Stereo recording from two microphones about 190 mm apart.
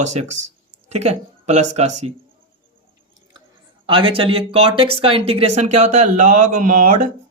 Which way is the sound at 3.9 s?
25° right (ahead or behind).